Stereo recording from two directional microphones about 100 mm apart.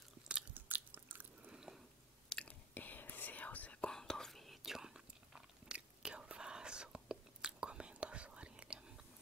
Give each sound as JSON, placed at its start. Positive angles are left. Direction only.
{"t": 0.3, "sound": "biting", "side_deg": -15}
{"t": 2.2, "sound": "whispering", "side_deg": 10}